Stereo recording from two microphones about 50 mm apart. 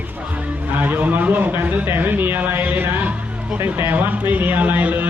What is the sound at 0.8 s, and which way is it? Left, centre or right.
A man's voice, right.